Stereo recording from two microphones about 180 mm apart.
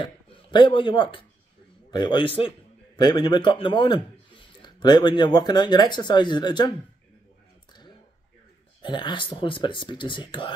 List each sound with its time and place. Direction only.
0.0 s a man's voice: 25° left (ahead or behind)
8.8 s a man's voice: 25° left (ahead or behind)